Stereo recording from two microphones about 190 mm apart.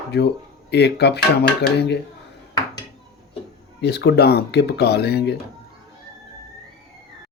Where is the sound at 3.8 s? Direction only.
60° left (ahead or behind).